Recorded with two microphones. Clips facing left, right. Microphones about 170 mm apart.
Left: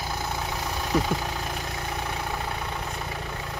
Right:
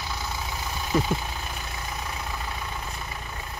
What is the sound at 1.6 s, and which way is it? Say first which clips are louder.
Vehicle: left 3 dB; 65° left (ahead or behind).